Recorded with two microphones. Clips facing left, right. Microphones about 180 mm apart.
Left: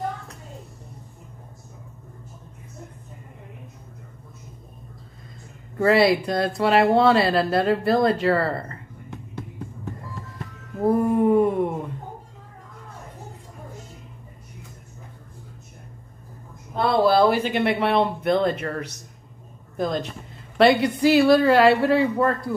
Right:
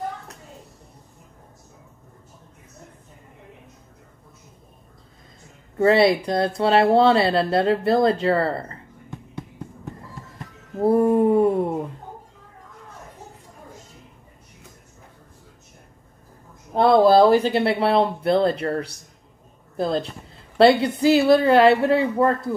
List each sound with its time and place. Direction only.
5.8 s speech: 25° right (ahead or behind)
10.9 s a sound: 30° right (ahead or behind)
16.9 s speech: 45° right (ahead or behind); by 22.6 s 25° right (ahead or behind)